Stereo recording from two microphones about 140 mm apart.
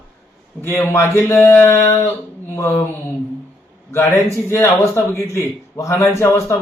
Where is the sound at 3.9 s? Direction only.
20° left (ahead or behind).